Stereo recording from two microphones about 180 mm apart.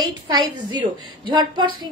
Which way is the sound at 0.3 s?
20° right (ahead or behind).